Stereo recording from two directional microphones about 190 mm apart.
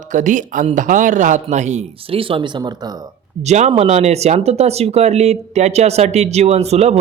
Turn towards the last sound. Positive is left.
turn(degrees=-35)  # may be behind; listen again after turning